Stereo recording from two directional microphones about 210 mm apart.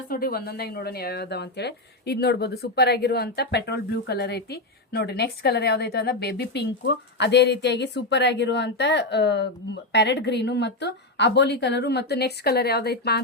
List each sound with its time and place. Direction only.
0.1 s speech: 45° left (ahead or behind)